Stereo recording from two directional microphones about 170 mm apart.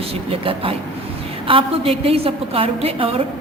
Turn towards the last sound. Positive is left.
turn(degrees=-35)  # may be behind; listen again after turning